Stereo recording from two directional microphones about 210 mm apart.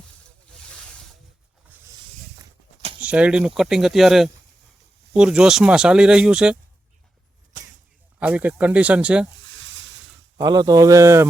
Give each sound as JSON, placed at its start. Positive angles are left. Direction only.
{"t": 0.5, "sound": "a sound", "side_deg": 5}
{"t": 1.7, "sound": "snake", "side_deg": -10}
{"t": 3.0, "sound": "speech", "side_deg": -5}
{"t": 8.2, "sound": "speech", "side_deg": -10}
{"t": 9.6, "sound": "a sound", "side_deg": -60}
{"t": 10.3, "sound": "speech", "side_deg": -20}